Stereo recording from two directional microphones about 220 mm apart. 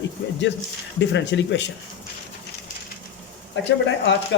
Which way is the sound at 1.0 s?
55° left (ahead or behind).